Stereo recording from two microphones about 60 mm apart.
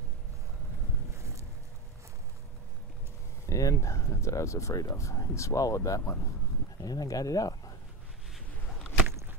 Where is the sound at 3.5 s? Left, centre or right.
Left.